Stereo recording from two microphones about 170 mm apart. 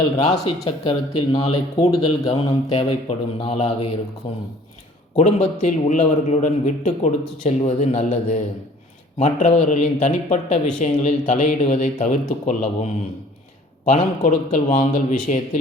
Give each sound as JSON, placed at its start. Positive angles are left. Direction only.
{"t": 0.2, "sound": "a man's voice", "side_deg": 45}
{"t": 13.9, "sound": "speech", "side_deg": 45}